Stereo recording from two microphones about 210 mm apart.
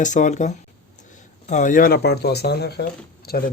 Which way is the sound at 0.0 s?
35° left (ahead or behind).